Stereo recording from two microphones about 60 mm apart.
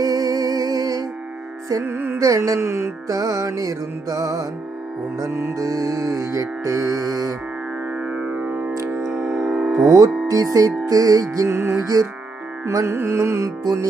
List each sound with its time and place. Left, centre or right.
0.0 s music: right
1.8 s carnatic music: right
2.1 s music: right
2.6 s carnatic music: right
3.1 s music: right
5.3 s carnatic music: right
5.5 s music: right
8.0 s music: centre
9.0 s music: centre
10.2 s music: right
10.8 s music: right
11.4 s carnatic music: right
11.9 s music: right
12.8 s carnatic music: right